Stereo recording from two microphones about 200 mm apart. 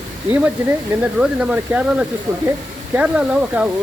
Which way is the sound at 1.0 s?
5° right (ahead or behind).